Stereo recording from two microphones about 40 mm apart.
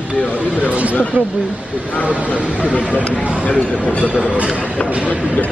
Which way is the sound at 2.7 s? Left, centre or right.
Left.